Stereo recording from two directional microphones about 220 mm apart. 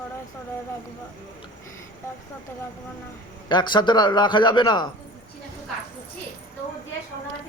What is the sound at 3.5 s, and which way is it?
A man's voice, 20° left (ahead or behind).